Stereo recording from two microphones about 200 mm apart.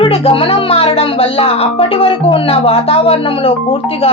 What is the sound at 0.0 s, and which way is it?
Speech, 25° left (ahead or behind).